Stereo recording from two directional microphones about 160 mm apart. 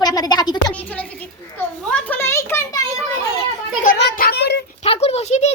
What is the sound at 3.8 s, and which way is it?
Speech, 65° left (ahead or behind).